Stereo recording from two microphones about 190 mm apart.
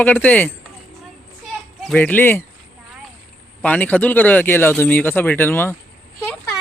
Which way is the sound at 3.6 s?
10° left (ahead or behind).